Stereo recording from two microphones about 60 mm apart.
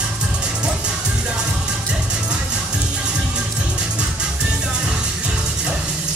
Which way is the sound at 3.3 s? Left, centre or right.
Centre.